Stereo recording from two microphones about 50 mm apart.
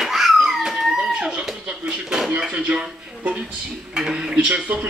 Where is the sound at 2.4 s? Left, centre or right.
Right.